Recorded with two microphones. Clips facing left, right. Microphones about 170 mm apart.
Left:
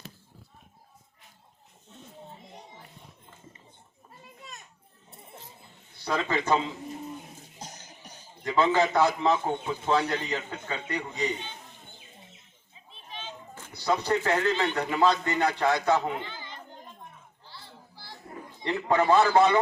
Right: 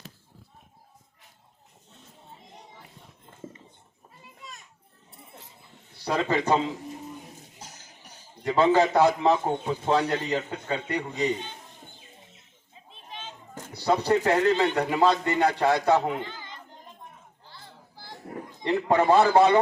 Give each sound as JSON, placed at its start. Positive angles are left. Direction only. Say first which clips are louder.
{"t": 6.1, "sound": "a man's voice", "louder": "right 2 dB", "side_deg": -35}
{"t": 8.4, "sound": "a man's voice", "louder": "right 3 dB", "side_deg": -35}
{"t": 13.8, "sound": "a man's voice", "louder": "right 4 dB", "side_deg": -35}
{"t": 17.5, "sound": "chatter", "louder": "even", "side_deg": -45}
{"t": 18.7, "sound": "a man's voice", "louder": "right 2 dB", "side_deg": -35}